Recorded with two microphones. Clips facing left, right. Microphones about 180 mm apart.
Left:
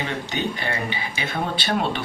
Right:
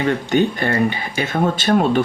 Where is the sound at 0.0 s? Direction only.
50° right (ahead or behind).